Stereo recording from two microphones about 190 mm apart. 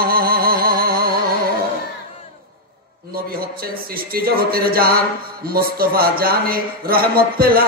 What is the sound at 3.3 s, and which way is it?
Speech, 50° right (ahead or behind).